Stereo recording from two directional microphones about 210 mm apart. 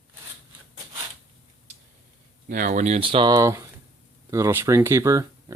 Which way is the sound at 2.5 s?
40° right (ahead or behind).